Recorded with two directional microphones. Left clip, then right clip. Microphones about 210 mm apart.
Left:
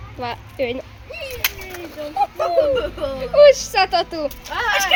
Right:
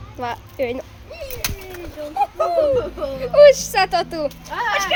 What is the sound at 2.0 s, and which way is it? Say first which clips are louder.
Speech: left 1 dB; 35° left (ahead or behind).